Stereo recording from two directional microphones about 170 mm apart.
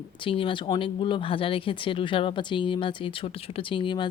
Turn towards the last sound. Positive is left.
turn(degrees=30)  # may be behind; listen again after turning